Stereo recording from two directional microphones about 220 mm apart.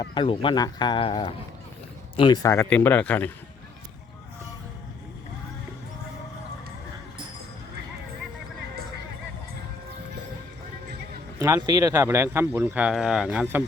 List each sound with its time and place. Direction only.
0.0 s speech: 20° left (ahead or behind)
11.3 s speech: 15° right (ahead or behind)